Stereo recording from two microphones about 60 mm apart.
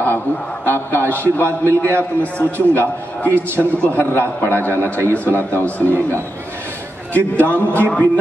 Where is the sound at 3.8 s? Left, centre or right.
Left.